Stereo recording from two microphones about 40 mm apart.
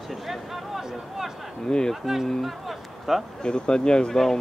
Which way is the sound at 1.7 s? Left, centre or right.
Centre.